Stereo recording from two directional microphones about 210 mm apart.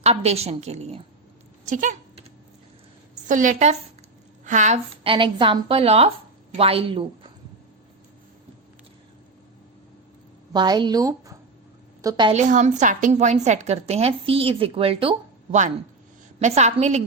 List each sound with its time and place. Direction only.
0.0 s a woman's voice: 30° right (ahead or behind)
1.6 s a sound: 35° right (ahead or behind)
3.2 s a woman's voice: 40° right (ahead or behind)
10.5 s a woman's voice: 20° right (ahead or behind)
12.4 s a woman's voice: 35° right (ahead or behind)
16.4 s a woman's voice: 30° right (ahead or behind)